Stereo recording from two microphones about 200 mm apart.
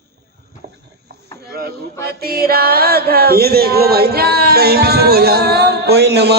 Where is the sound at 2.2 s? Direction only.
50° right (ahead or behind).